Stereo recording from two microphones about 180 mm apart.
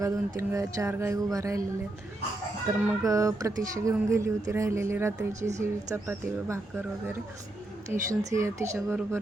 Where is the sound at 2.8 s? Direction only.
20° right (ahead or behind).